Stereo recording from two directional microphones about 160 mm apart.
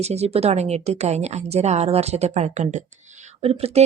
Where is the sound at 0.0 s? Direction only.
40° right (ahead or behind).